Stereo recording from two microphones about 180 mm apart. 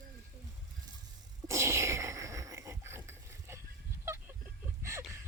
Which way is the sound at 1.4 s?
15° right (ahead or behind).